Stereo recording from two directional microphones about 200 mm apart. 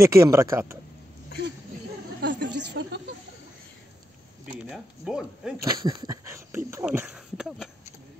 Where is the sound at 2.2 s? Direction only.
60° right (ahead or behind).